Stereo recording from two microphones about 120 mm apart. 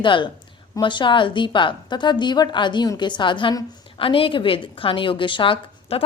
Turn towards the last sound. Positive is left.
turn(degrees=50)  # may be behind; listen again after turning